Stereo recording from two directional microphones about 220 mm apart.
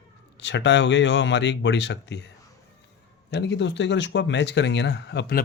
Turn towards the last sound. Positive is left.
turn(degrees=45)  # may be behind; listen again after turning